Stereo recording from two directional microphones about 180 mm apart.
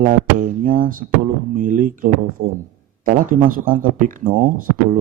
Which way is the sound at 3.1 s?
50° right (ahead or behind).